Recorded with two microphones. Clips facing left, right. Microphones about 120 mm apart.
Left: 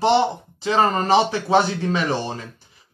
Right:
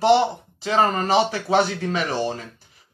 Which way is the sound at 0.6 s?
35° left (ahead or behind).